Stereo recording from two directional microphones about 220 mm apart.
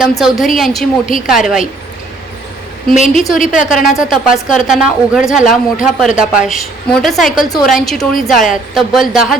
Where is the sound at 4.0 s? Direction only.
Centre (ahead or behind).